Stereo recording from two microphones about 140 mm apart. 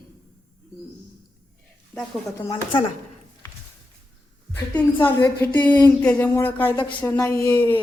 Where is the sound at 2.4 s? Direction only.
35° left (ahead or behind).